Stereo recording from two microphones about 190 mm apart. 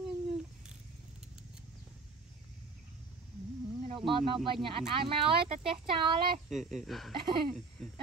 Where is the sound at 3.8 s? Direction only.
25° right (ahead or behind).